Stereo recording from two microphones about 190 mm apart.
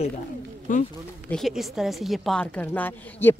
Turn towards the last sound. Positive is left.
turn(degrees=10)  # may be behind; listen again after turning